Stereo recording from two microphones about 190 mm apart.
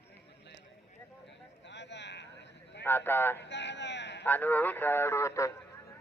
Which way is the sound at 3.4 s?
65° left (ahead or behind).